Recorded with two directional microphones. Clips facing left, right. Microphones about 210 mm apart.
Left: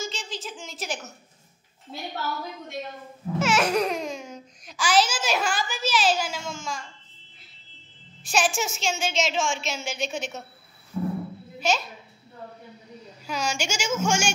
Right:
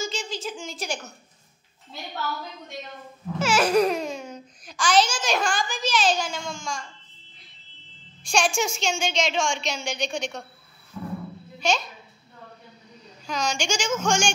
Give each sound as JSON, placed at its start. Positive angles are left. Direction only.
{"t": 0.0, "sound": "a sound", "side_deg": 0}
{"t": 3.3, "sound": "a woman's voice", "side_deg": 0}
{"t": 8.2, "sound": "a woman's voice", "side_deg": 5}
{"t": 10.9, "sound": "music", "side_deg": 25}
{"t": 11.6, "sound": "a woman's voice", "side_deg": 5}
{"t": 13.3, "sound": "a woman's voice", "side_deg": 10}